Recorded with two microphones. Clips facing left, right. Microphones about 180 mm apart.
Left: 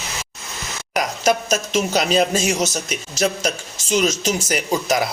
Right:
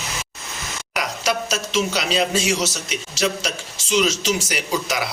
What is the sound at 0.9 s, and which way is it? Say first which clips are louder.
A man's voice: left 5 dB; 45° left (ahead or behind).